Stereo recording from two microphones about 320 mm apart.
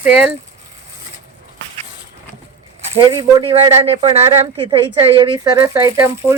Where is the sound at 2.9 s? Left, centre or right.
Centre.